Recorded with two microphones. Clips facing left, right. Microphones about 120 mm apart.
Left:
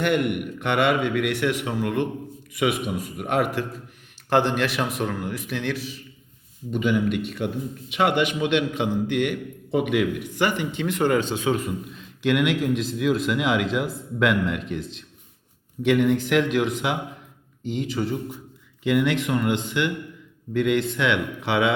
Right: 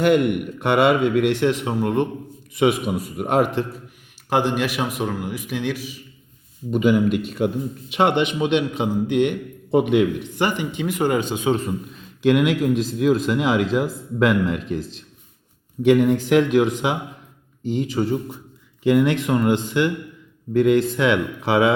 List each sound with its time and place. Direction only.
0.6 s a man's voice: 40° right (ahead or behind)
4.3 s a man's voice: 10° right (ahead or behind)
6.7 s a man's voice: 45° right (ahead or behind); by 9.4 s 20° right (ahead or behind)
9.7 s speech: 30° right (ahead or behind)
10.3 s speech: 20° right (ahead or behind)
12.2 s speech: 40° right (ahead or behind)